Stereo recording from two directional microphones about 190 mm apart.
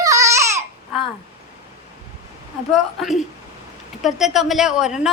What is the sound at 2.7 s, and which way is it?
A woman's voice, centre (ahead or behind).